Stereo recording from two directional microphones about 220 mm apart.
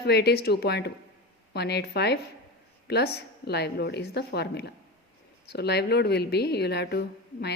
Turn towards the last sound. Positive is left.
turn(degrees=50)  # may be behind; listen again after turning